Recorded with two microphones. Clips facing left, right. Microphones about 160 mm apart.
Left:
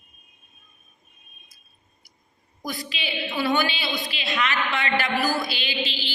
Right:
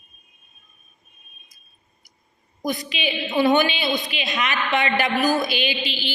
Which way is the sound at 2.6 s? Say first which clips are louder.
Right 6 dB; 20° right (ahead or behind).